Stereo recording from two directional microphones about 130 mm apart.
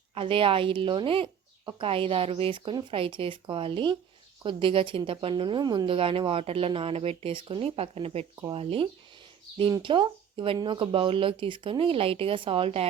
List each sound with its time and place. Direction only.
0.1 s speech: 45° right (ahead or behind)
9.6 s speech: 35° right (ahead or behind)